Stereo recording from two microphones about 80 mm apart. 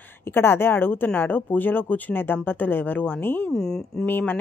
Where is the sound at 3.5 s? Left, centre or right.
Centre.